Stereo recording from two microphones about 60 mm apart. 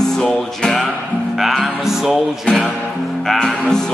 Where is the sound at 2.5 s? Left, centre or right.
Centre.